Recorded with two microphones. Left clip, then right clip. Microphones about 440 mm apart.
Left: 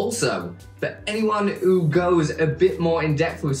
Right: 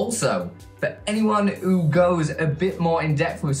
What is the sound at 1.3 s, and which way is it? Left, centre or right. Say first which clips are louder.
Speech: left 3 dB; centre.